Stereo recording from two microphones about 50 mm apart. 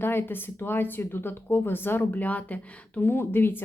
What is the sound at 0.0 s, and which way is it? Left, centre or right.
A woman's voice, left.